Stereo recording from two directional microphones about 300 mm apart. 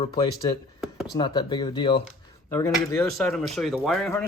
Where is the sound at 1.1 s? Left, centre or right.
Centre.